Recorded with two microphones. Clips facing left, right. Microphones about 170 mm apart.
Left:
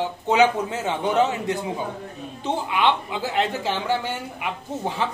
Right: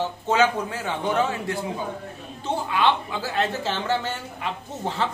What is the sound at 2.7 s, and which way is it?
A man's voice, 15° left (ahead or behind).